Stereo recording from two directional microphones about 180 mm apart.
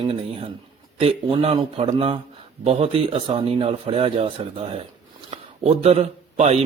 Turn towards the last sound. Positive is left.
turn(degrees=-35)  # may be behind; listen again after turning